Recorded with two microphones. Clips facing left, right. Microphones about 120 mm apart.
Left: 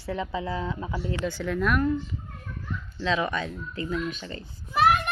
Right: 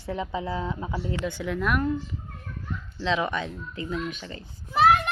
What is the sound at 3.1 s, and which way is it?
Speech, 20° right (ahead or behind).